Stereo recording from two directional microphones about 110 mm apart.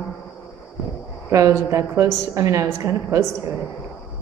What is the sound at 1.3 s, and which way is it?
A woman's voice, 25° right (ahead or behind).